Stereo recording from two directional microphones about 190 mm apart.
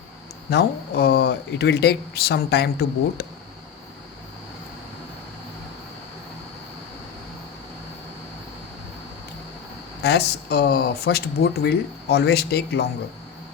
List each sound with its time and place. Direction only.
0.5 s speech: 55° left (ahead or behind)
10.0 s speech: 60° left (ahead or behind)